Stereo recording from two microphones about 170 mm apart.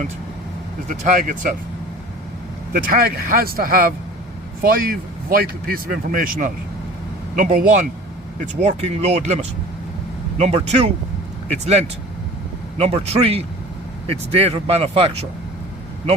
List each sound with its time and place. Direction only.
0.9 s speech: 45° right (ahead or behind)
2.7 s speech: 60° right (ahead or behind)
8.6 s speech: 40° right (ahead or behind)